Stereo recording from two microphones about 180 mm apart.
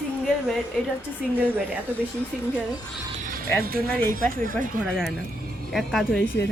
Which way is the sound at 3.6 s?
55° right (ahead or behind).